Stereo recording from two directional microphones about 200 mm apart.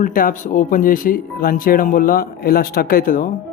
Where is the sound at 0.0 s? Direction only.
45° left (ahead or behind).